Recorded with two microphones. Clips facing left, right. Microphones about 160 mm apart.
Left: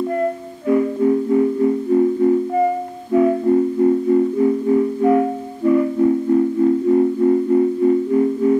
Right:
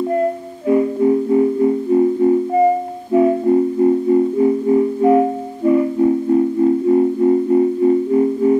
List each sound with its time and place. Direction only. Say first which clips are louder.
0.7 s music: right 2 dB; 20° right (ahead or behind)